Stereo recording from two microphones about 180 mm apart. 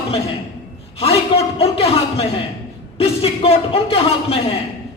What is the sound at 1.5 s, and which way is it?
A man's voice, 35° left (ahead or behind).